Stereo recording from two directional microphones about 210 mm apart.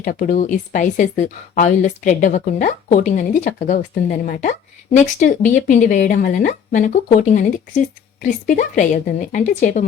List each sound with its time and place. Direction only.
0.0 s a woman's voice: 40° left (ahead or behind)